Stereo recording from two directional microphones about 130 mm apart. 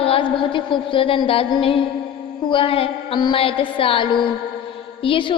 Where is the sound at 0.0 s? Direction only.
45° left (ahead or behind).